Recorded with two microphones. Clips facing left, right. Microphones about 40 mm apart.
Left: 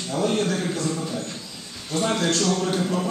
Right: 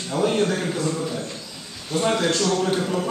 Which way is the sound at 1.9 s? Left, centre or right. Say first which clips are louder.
Right 2 dB; centre.